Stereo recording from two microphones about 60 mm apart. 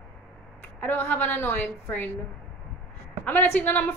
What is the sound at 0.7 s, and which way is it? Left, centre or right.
A woman's voice, left.